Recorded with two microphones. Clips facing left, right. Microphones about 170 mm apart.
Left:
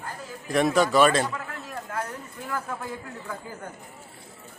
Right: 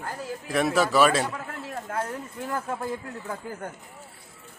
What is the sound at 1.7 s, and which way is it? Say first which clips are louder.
Speech: right 2 dB; 25° right (ahead or behind).